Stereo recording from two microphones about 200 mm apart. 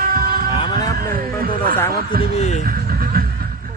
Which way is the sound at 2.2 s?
35° left (ahead or behind).